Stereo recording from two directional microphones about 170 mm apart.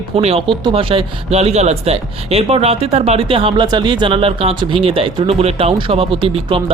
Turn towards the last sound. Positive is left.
turn(degrees=-30)  # may be behind; listen again after turning